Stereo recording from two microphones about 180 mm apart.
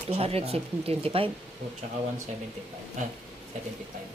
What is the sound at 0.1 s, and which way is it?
Speech, 35° right (ahead or behind).